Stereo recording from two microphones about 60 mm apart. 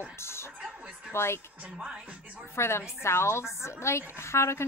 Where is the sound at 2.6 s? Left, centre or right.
Left.